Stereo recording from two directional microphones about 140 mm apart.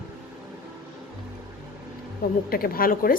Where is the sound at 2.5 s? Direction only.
90° left.